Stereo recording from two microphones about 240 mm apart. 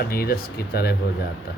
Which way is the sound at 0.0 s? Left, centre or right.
Left.